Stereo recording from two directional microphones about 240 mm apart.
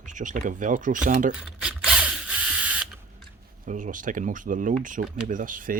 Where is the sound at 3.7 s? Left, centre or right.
Right.